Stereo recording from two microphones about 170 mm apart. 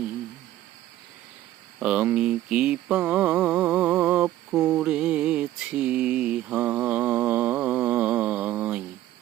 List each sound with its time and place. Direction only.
1.8 s mantra: 5° right (ahead or behind)